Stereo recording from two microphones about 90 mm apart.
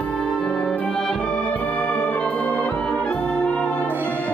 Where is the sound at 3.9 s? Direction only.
25° right (ahead or behind).